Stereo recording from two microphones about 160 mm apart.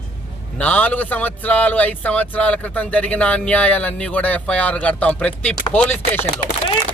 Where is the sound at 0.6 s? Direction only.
10° left (ahead or behind).